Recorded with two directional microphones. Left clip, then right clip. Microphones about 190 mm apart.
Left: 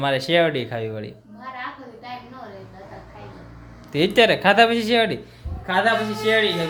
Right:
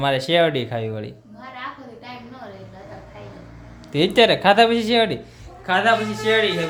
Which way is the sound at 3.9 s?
5° right (ahead or behind).